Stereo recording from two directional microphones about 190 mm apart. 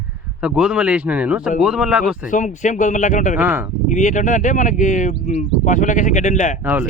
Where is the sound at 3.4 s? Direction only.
10° right (ahead or behind).